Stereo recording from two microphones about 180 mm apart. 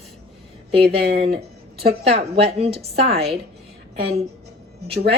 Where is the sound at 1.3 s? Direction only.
65° right (ahead or behind).